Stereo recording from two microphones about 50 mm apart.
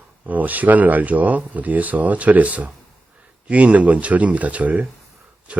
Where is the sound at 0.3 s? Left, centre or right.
Right.